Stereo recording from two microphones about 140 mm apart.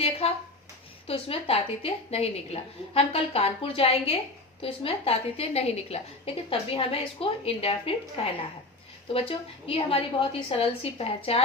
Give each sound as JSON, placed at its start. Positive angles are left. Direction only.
{"t": 0.0, "sound": "a woman's voice", "side_deg": 45}
{"t": 9.6, "sound": "a woman's voice", "side_deg": 40}